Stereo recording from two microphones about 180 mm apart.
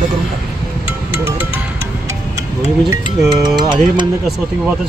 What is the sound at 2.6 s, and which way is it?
Speech, 15° right (ahead or behind).